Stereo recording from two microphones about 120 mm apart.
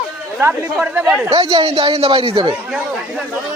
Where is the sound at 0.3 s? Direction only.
15° right (ahead or behind).